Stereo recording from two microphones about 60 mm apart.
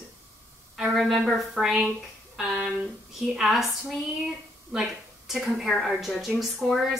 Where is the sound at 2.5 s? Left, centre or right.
Centre.